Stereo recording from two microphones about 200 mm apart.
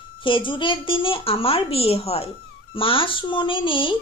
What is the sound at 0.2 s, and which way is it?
A woman's voice, 25° left (ahead or behind).